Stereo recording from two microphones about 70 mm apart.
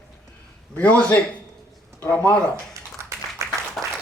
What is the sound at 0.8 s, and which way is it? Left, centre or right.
Speech, left.